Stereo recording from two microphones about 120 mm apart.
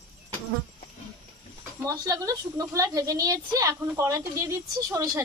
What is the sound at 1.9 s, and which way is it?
A woman's voice, 30° right (ahead or behind).